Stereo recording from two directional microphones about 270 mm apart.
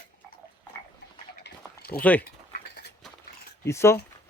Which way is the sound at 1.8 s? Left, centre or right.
Left.